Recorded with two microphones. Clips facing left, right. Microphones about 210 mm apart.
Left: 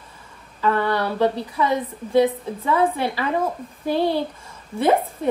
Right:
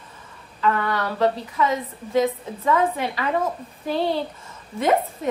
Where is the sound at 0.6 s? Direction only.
35° left (ahead or behind).